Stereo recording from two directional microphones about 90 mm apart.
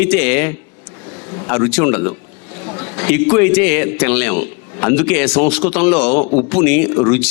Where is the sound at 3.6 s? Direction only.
20° left (ahead or behind).